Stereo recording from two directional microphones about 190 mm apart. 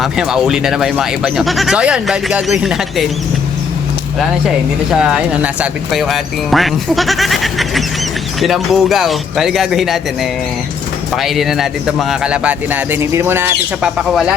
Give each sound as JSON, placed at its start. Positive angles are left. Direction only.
{"t": 0.0, "sound": "speech", "side_deg": -5}
{"t": 4.2, "sound": "speech", "side_deg": 0}
{"t": 11.1, "sound": "speech", "side_deg": 0}
{"t": 14.1, "sound": "speech", "side_deg": 0}